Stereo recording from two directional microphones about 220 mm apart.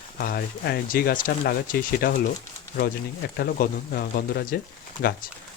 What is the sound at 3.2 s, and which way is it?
Speech, 45° left (ahead or behind).